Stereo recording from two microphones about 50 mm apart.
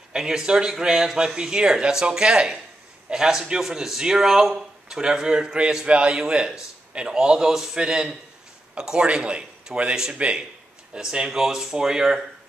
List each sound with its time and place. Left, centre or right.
0.1 s a man's voice: centre